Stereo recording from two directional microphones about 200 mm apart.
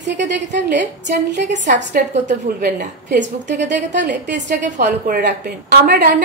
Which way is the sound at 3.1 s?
60° right (ahead or behind).